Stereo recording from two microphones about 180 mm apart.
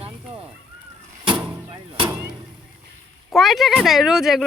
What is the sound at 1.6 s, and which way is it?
Speech, 25° right (ahead or behind).